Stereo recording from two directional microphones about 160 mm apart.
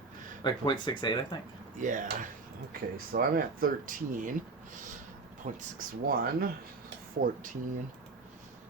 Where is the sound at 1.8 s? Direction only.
55° right (ahead or behind).